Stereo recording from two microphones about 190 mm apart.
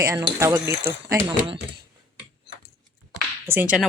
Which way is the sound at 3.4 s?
10° right (ahead or behind).